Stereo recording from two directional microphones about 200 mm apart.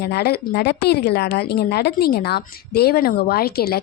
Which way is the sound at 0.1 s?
50° left (ahead or behind).